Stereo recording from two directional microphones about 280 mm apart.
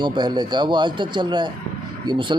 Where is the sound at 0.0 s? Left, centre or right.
Centre.